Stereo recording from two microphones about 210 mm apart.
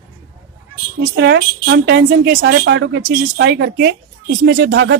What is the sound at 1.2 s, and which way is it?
A woman's voice, 55° right (ahead or behind).